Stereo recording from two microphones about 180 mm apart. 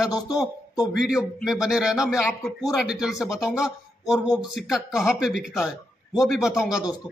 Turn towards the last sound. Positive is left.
turn(degrees=-5)  # may be behind; listen again after turning